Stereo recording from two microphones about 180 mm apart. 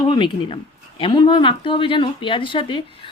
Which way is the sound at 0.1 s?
25° left (ahead or behind).